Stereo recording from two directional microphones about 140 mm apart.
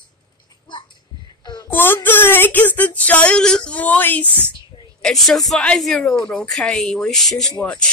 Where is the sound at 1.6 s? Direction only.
15° left (ahead or behind).